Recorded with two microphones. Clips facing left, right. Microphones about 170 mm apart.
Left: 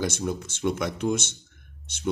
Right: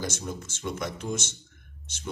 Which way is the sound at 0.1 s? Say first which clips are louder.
Left 6 dB; 60° left (ahead or behind).